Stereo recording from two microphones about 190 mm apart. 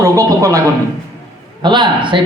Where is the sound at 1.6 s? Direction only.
25° right (ahead or behind).